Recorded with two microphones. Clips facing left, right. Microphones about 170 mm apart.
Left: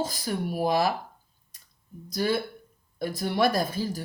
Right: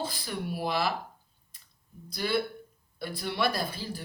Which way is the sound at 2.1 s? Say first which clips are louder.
Left 3 dB; 45° left (ahead or behind).